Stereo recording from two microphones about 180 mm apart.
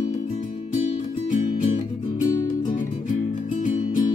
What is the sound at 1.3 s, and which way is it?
Music, 45° left (ahead or behind).